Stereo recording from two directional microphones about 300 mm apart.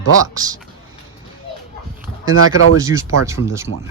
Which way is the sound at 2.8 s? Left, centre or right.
Centre.